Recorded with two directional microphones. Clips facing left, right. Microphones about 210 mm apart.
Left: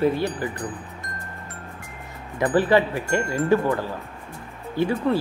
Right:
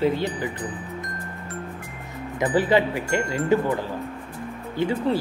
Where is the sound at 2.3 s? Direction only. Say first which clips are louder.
Left 1 dB; 15° right (ahead or behind).